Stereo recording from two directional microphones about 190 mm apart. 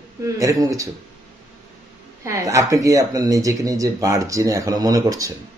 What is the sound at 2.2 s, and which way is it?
A man's voice, 15° right (ahead or behind).